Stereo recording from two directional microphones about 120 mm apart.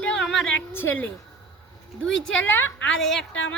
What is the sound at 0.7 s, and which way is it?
A woman's voice, 15° left (ahead or behind).